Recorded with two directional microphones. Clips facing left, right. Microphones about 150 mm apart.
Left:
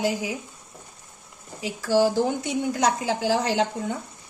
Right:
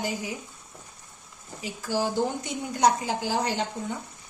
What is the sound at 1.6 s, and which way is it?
A woman's voice, 90° left.